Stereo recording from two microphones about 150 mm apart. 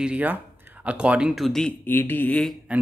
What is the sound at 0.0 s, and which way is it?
Speech, 10° right (ahead or behind).